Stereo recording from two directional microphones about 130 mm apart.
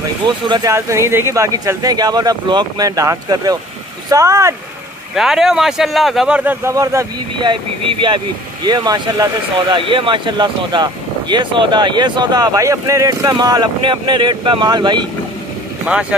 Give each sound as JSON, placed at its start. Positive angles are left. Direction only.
{"t": 0.5, "sound": "speech", "side_deg": -25}
{"t": 5.1, "sound": "speech", "side_deg": -5}
{"t": 8.0, "sound": "speech", "side_deg": -35}
{"t": 15.9, "sound": "speech", "side_deg": -10}